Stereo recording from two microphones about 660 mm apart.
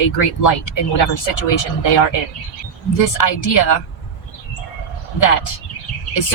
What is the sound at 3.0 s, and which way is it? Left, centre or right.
Speech, left.